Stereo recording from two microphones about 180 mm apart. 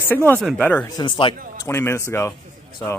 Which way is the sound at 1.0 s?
30° left (ahead or behind).